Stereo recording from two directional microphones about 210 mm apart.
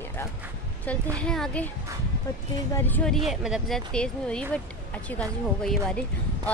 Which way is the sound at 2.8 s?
10° left (ahead or behind).